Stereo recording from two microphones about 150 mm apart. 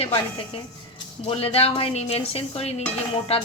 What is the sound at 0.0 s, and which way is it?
Dishes, 40° left (ahead or behind).